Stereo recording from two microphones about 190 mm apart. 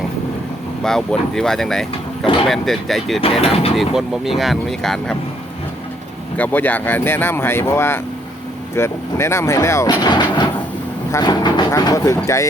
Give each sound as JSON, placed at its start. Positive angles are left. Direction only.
{"t": 0.8, "sound": "speech", "side_deg": 0}
{"t": 3.2, "sound": "speech", "side_deg": 30}
{"t": 3.8, "sound": "speech", "side_deg": 0}
{"t": 6.3, "sound": "speech", "side_deg": 10}